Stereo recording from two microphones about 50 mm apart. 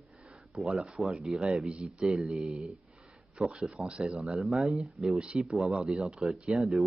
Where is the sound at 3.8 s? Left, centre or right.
Centre.